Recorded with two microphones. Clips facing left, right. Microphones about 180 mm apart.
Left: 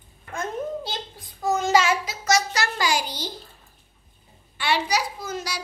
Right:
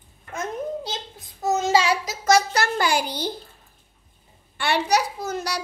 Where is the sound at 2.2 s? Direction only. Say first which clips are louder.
Right 4 dB; 55° right (ahead or behind).